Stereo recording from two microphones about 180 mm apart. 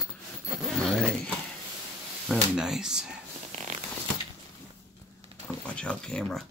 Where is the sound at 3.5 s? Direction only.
40° right (ahead or behind).